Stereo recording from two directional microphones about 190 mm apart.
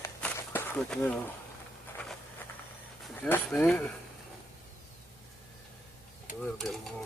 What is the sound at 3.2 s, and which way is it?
Speech, 5° left (ahead or behind).